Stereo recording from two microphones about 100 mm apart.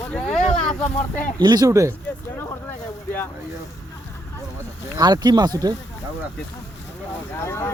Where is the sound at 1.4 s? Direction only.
45° right (ahead or behind).